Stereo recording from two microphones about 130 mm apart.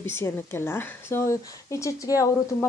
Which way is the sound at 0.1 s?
20° left (ahead or behind).